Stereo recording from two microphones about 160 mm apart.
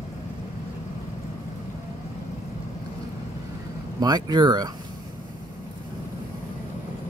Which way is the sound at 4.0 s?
25° right (ahead or behind).